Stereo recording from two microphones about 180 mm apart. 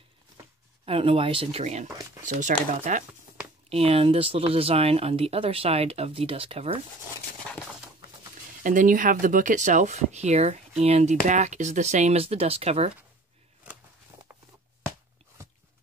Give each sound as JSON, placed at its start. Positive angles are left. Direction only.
{"t": 0.8, "sound": "speech", "side_deg": -30}
{"t": 3.6, "sound": "speech", "side_deg": -35}
{"t": 8.6, "sound": "speech", "side_deg": -45}